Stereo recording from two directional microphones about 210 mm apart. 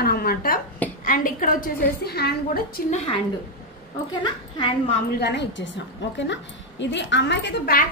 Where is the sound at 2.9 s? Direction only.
30° left (ahead or behind).